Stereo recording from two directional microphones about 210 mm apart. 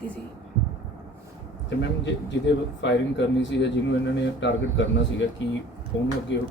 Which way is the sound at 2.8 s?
55° left (ahead or behind).